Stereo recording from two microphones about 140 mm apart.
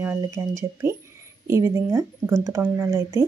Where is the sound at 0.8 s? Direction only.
15° right (ahead or behind).